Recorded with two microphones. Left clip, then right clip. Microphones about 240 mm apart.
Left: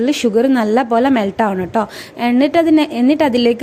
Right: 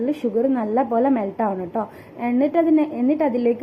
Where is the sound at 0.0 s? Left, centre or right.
Left.